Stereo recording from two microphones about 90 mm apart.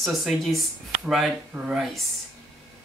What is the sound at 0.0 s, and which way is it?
Speech, centre (ahead or behind).